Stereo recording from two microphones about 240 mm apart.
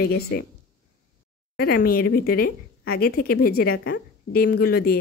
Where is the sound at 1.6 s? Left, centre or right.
Left.